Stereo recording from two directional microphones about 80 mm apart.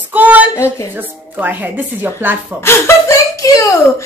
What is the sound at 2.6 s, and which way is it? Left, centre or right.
Speech, left.